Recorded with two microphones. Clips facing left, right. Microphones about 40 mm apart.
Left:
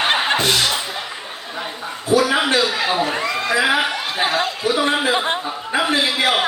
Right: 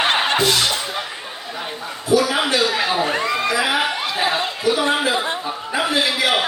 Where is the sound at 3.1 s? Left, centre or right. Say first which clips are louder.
Right 1 dB; centre.